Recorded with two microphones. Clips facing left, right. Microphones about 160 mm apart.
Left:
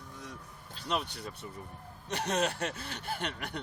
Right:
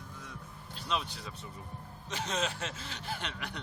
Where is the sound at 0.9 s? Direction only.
50° left (ahead or behind).